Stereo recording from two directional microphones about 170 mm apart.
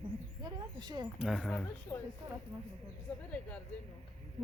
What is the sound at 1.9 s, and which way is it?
Speech, 20° left (ahead or behind).